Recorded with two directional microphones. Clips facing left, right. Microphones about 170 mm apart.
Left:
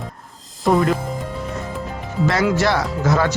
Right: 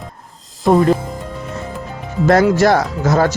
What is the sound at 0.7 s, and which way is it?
Speech, 30° right (ahead or behind).